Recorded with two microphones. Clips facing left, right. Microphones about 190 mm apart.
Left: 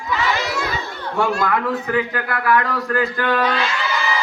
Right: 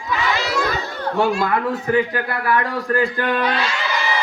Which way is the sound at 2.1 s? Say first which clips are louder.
Left 1 dB; 25° right (ahead or behind).